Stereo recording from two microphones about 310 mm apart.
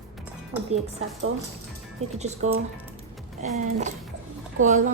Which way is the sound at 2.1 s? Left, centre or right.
Right.